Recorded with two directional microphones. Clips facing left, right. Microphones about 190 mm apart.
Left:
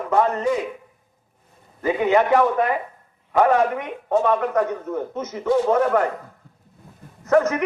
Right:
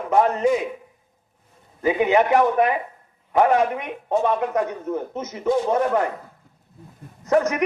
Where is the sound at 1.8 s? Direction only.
15° right (ahead or behind).